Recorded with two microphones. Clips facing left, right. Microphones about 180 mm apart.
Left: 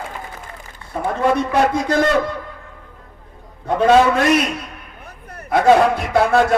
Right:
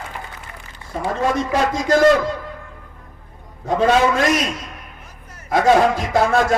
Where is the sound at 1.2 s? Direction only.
60° left (ahead or behind).